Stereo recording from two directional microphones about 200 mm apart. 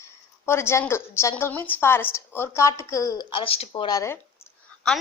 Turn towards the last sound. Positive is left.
turn(degrees=10)  # may be behind; listen again after turning